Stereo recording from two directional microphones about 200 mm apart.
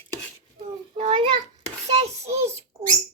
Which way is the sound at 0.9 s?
30° right (ahead or behind).